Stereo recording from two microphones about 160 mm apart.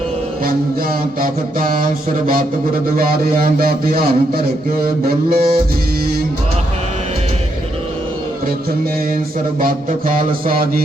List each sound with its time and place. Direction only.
1.2 s mantra: 60° right (ahead or behind)
3.4 s speech: 65° right (ahead or behind)
9.6 s mantra: 60° right (ahead or behind)